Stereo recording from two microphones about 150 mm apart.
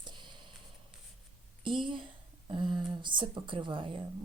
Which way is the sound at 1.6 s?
35° right (ahead or behind).